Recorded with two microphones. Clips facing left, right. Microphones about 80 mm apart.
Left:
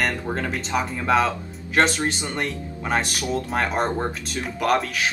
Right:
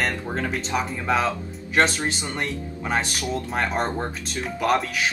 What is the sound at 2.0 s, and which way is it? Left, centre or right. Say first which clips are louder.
Speech: left 2 dB; centre.